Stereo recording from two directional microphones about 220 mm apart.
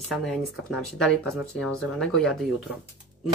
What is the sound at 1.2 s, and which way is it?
Speech, 10° right (ahead or behind).